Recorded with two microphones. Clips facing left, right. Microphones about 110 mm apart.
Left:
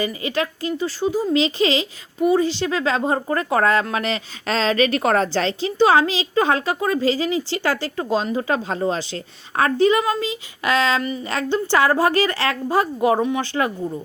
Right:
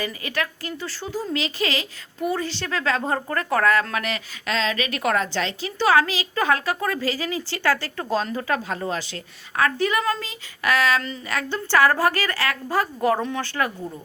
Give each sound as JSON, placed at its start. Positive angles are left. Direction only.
{"t": 0.0, "sound": "a woman's voice", "side_deg": 20}